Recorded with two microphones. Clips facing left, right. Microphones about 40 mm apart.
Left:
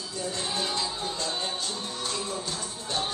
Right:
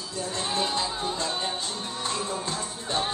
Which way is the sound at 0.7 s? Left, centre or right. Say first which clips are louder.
Right 3 dB; right.